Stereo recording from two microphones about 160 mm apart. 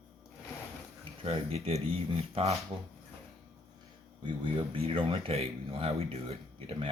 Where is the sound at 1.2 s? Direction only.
40° right (ahead or behind).